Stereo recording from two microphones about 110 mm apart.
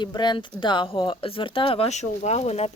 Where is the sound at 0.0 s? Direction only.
45° left (ahead or behind).